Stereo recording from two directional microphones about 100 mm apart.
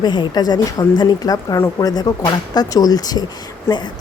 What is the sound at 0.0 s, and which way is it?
Speech, 45° left (ahead or behind).